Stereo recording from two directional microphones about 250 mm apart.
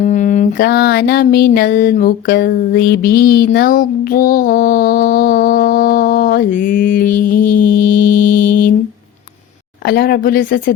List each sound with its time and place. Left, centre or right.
0.0 s music: left
9.8 s music: left